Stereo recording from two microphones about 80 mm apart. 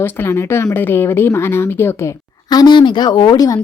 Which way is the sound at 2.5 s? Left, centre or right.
Left.